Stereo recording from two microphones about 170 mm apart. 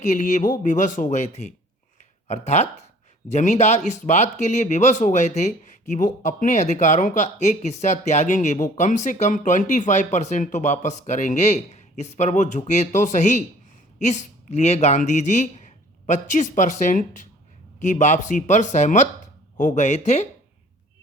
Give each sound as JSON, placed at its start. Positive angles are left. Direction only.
{"t": 0.0, "sound": "speech", "side_deg": 45}